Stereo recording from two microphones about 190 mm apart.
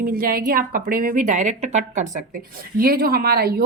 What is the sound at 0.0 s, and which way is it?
A woman's voice, 50° right (ahead or behind).